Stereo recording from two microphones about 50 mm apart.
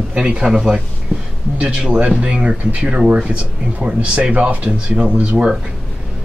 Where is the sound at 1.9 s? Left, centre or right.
Right.